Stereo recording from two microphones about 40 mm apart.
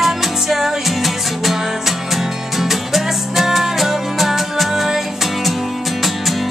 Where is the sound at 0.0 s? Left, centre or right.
Centre.